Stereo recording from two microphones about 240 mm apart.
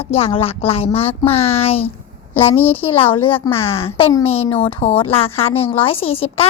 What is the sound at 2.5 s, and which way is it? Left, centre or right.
Speech, centre.